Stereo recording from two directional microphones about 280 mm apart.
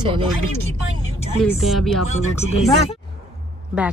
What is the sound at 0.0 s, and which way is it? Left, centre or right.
Speech, centre.